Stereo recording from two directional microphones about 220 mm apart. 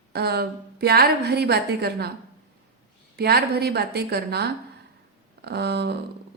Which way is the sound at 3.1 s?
45° right (ahead or behind).